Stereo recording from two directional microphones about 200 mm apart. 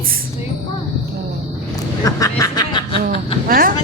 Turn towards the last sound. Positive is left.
turn(degrees=-45)  # may be behind; listen again after turning